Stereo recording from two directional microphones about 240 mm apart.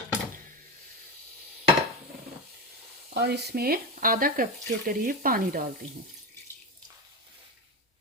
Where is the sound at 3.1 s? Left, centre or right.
Right.